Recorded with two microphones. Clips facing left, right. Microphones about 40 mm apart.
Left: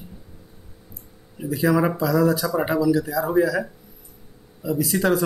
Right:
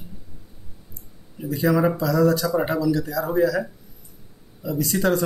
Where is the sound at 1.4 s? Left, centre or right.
Centre.